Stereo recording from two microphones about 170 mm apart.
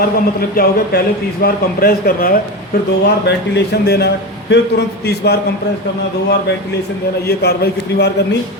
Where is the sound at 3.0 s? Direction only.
80° left.